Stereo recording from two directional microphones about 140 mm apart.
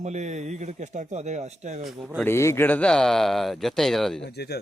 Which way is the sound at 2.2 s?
20° left (ahead or behind).